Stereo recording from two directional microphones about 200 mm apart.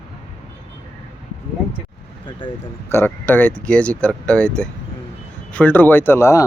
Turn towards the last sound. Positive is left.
turn(degrees=15)  # may be behind; listen again after turning